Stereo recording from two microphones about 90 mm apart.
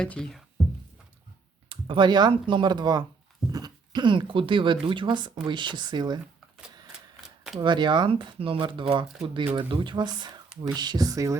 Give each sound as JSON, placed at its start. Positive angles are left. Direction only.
{"t": 0.0, "sound": "speech", "side_deg": 10}
{"t": 1.7, "sound": "speech", "side_deg": -65}
{"t": 7.2, "sound": "shuffling cards", "side_deg": -5}
{"t": 7.6, "sound": "speech", "side_deg": -60}